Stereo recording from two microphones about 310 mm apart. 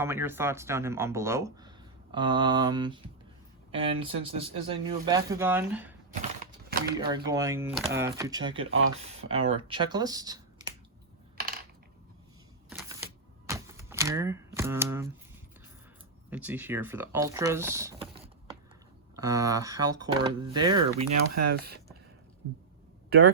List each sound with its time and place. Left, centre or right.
0.0 s speech: centre
6.4 s a sound: right
7.3 s speech: centre
8.5 s speech: right
9.3 s speech: centre
11.3 s coin: right
13.5 s typewriter: centre
16.3 s speech: centre
21.0 s speech: right